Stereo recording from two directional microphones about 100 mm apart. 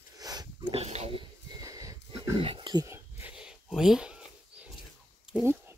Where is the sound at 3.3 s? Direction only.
5° right (ahead or behind).